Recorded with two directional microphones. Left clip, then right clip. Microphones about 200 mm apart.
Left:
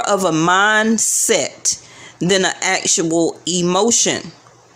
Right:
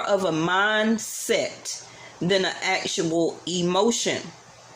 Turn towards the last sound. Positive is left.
turn(degrees=35)  # may be behind; listen again after turning